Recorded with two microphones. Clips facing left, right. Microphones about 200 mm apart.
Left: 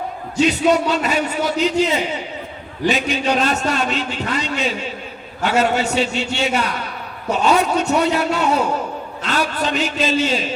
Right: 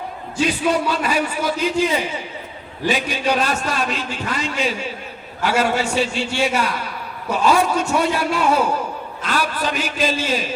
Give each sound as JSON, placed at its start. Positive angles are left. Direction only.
{"t": 0.3, "sound": "a man's voice", "side_deg": 25}